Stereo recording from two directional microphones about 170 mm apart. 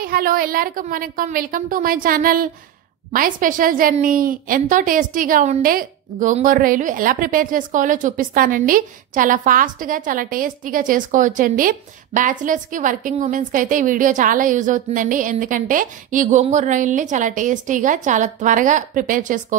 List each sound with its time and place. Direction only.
0.0 s a woman's voice: 60° right (ahead or behind)